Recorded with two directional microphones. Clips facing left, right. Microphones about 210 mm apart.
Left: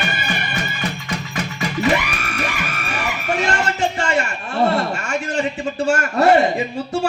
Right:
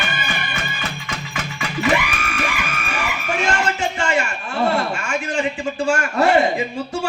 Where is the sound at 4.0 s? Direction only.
40° left (ahead or behind).